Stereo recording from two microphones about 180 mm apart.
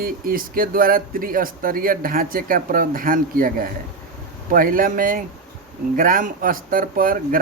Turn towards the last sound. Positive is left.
turn(degrees=-50)  # may be behind; listen again after turning